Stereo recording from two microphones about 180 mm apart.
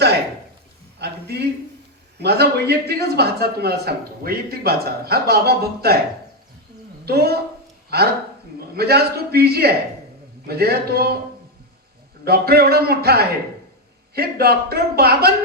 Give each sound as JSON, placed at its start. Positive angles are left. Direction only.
{"t": 0.9, "sound": "a man's voice", "side_deg": -65}
{"t": 7.0, "sound": "a man's voice", "side_deg": -60}
{"t": 12.2, "sound": "a man's voice", "side_deg": -60}